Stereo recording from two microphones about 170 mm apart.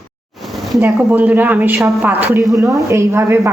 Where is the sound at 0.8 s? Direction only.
10° right (ahead or behind).